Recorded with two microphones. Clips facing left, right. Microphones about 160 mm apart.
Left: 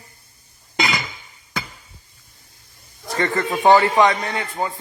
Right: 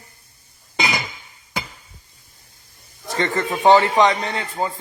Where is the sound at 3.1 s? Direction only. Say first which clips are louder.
Even; 20° right (ahead or behind).